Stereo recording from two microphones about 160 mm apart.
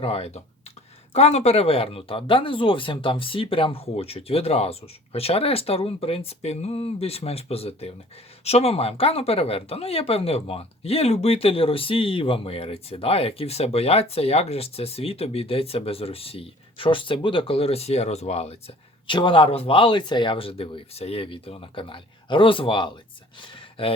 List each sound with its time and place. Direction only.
0.0 s speech: 40° left (ahead or behind)
19.0 s speech: 30° left (ahead or behind)